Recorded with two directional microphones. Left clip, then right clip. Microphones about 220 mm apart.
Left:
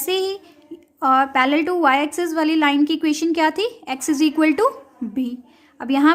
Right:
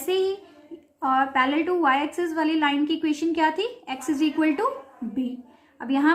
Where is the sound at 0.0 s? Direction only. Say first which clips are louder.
Left 2 dB; 50° left (ahead or behind).